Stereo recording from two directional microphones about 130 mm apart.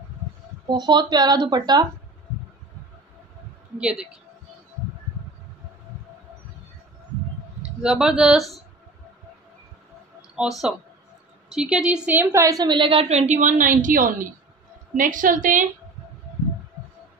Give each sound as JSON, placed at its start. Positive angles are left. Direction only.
{"t": 0.7, "sound": "speech", "side_deg": -35}
{"t": 3.7, "sound": "a woman's voice", "side_deg": -10}
{"t": 7.8, "sound": "speech", "side_deg": -5}
{"t": 10.4, "sound": "a woman's voice", "side_deg": -10}
{"t": 13.1, "sound": "a woman's voice", "side_deg": -60}